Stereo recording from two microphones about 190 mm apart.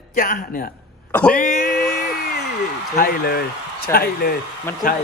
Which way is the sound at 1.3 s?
45° left (ahead or behind).